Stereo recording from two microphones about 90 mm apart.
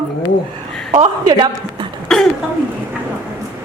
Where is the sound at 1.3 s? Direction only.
50° right (ahead or behind).